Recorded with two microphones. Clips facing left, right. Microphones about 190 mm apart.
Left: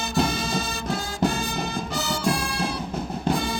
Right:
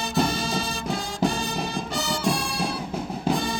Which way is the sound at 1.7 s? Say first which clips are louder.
Even; centre (ahead or behind).